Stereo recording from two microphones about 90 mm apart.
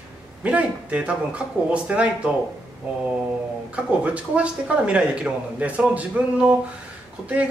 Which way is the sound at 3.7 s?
15° right (ahead or behind).